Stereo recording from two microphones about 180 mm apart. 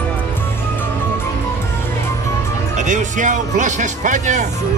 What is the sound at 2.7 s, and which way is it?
Speech, 45° right (ahead or behind).